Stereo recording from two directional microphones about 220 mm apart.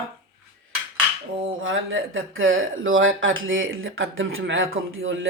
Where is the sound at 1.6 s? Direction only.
60° right (ahead or behind).